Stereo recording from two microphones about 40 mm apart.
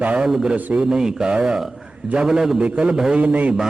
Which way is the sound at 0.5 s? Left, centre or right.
Right.